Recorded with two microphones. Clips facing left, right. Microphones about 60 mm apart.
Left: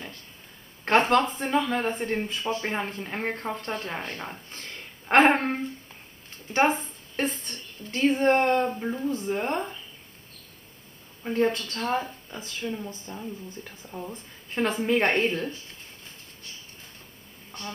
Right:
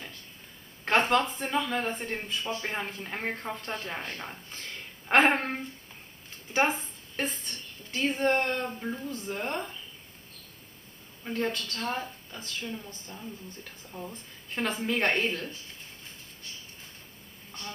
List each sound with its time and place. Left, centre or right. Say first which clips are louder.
0.8 s speech: left 4 dB; centre
3.1 s speech: left 3 dB; centre
6.8 s a woman's voice: left 4 dB; centre
8.1 s speech: left 6 dB; centre
11.2 s speech: left 6 dB; left